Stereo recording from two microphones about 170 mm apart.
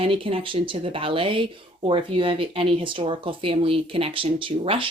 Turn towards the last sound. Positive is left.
turn(degrees=-30)  # may be behind; listen again after turning